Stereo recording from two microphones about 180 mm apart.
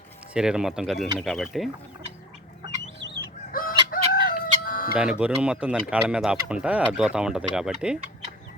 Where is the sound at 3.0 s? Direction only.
80° right.